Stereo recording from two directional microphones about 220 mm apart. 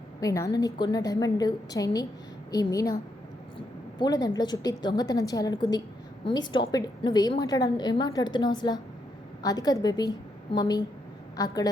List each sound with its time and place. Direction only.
0.2 s a woman's voice: 15° left (ahead or behind)